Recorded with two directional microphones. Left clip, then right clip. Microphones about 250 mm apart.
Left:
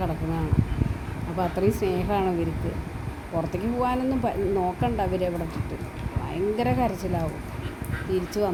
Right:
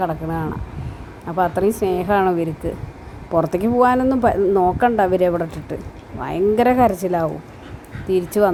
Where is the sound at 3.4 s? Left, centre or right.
Right.